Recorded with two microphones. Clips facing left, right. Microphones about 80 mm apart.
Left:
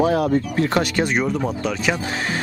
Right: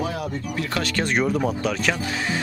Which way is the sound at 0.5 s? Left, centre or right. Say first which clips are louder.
Left 7 dB; left.